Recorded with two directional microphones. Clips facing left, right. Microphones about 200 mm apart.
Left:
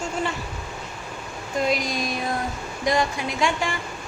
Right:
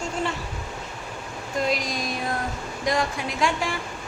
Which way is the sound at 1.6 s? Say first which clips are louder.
Left 2 dB; centre (ahead or behind).